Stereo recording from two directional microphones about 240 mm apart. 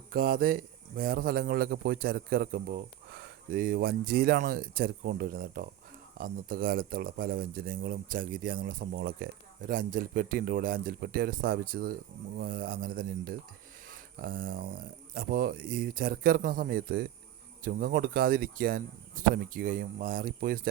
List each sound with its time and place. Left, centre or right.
0.1 s speech: right
13.8 s a sound: right
15.1 s speech: right